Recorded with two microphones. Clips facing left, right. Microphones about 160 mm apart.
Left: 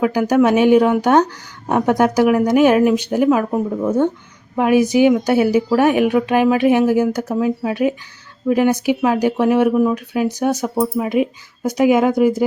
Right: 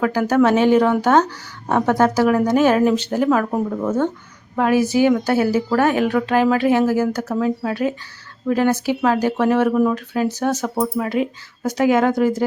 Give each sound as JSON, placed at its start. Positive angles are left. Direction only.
{"t": 0.0, "sound": "speech", "side_deg": 15}